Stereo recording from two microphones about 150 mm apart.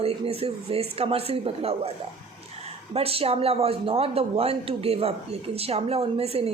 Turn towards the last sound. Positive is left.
turn(degrees=-40)  # may be behind; listen again after turning